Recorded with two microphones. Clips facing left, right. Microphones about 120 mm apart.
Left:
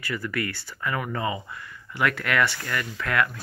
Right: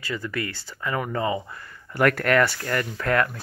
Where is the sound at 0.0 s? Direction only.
25° right (ahead or behind).